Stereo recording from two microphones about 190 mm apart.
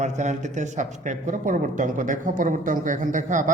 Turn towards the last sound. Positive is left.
turn(degrees=-40)  # may be behind; listen again after turning